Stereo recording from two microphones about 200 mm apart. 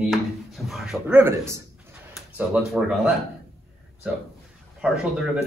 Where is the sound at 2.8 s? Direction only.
Centre (ahead or behind).